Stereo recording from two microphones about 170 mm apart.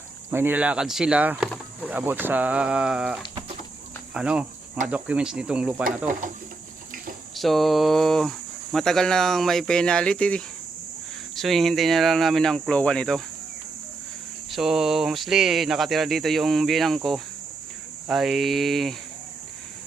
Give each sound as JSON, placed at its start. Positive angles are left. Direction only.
{"t": 0.3, "sound": "speech", "side_deg": -10}
{"t": 4.1, "sound": "cricket", "side_deg": -5}
{"t": 4.9, "sound": "speech", "side_deg": -10}
{"t": 6.1, "sound": "speech", "side_deg": -50}
{"t": 7.3, "sound": "speech", "side_deg": 0}
{"t": 14.5, "sound": "speech", "side_deg": 0}